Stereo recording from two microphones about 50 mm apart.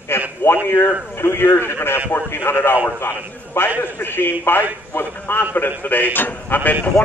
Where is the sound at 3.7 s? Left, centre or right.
Left.